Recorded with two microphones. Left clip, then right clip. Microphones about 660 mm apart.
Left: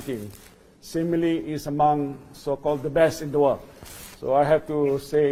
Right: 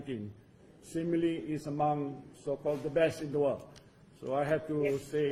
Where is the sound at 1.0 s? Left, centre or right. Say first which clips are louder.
Left 8 dB; left.